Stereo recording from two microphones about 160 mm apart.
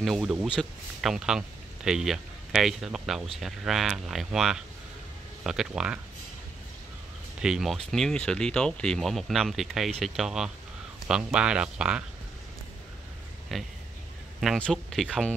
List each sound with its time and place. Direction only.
0.0 s speech: centre (ahead or behind)
7.4 s speech: centre (ahead or behind)
13.5 s speech: centre (ahead or behind)